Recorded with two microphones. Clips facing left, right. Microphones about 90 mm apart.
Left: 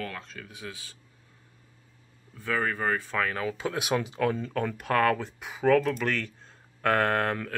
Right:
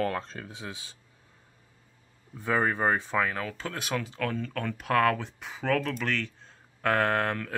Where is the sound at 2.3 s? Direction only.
20° right (ahead or behind).